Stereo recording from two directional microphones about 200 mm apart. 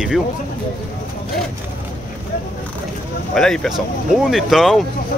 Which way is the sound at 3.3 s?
Centre (ahead or behind).